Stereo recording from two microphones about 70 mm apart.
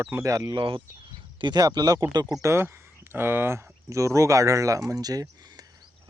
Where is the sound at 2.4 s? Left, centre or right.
Right.